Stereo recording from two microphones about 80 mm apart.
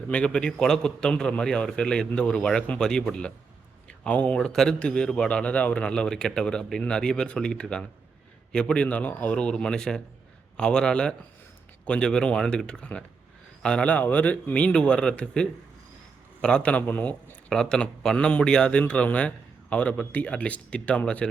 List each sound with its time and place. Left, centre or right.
0.1 s a man's voice: centre
3.8 s a sound: centre
4.4 s a man's voice: centre
17.5 s a man's voice: centre